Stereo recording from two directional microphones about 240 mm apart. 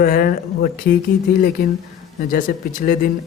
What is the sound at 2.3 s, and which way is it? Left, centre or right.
Speech, left.